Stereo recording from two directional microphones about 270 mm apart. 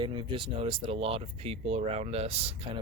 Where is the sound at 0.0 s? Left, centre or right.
Centre.